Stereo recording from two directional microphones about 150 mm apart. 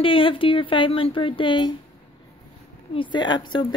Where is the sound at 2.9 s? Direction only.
30° left (ahead or behind).